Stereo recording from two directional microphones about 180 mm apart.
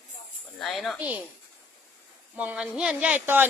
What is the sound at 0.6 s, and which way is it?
Speech, centre (ahead or behind).